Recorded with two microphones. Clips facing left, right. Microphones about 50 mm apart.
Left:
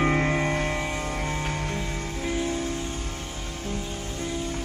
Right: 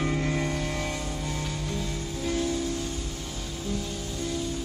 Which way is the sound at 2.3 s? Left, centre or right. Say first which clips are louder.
Even; left.